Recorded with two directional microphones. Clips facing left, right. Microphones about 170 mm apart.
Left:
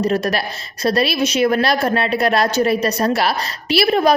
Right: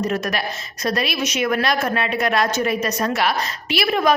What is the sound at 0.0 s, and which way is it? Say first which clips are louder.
A woman's voice: left 4 dB; 30° left (ahead or behind).